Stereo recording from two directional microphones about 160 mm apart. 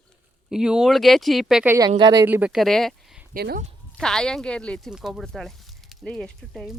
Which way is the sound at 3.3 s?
70° right (ahead or behind).